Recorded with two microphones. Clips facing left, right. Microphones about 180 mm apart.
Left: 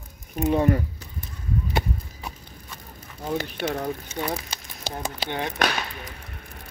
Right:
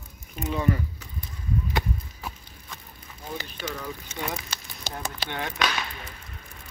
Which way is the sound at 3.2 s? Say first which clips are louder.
Left 8 dB; 65° left (ahead or behind).